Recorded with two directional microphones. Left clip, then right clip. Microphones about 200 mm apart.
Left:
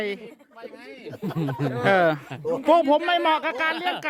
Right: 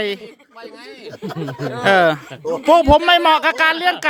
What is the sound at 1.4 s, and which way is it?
Speech, 45° right (ahead or behind).